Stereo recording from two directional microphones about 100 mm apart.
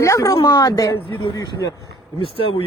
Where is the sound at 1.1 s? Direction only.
45° left (ahead or behind).